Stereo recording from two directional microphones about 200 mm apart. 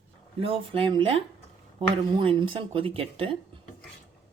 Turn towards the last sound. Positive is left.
turn(degrees=-25)  # may be behind; listen again after turning